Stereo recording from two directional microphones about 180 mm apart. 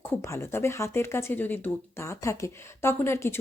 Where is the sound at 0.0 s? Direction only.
15° left (ahead or behind).